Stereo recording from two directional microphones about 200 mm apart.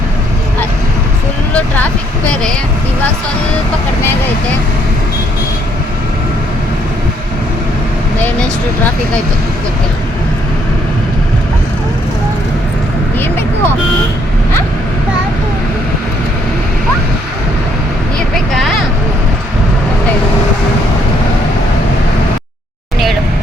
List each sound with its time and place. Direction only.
1.5 s vehicle: 5° left (ahead or behind)
8.2 s speech: 10° left (ahead or behind)